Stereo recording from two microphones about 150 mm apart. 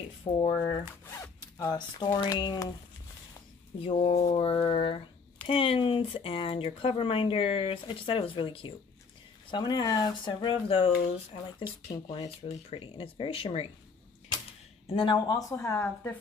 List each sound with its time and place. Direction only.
0.5 s speech: 25° left (ahead or behind)
3.8 s speech: 40° left (ahead or behind)
14.9 s speech: 35° left (ahead or behind); by 16.1 s 20° left (ahead or behind)